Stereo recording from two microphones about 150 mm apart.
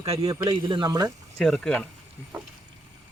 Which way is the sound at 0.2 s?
25° right (ahead or behind).